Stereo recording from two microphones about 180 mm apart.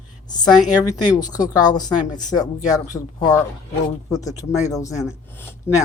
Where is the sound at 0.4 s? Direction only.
20° left (ahead or behind).